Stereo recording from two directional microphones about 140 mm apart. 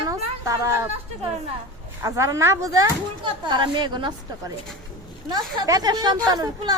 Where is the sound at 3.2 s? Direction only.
35° right (ahead or behind).